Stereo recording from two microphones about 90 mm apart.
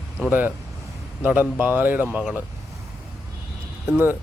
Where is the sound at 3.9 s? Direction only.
25° right (ahead or behind).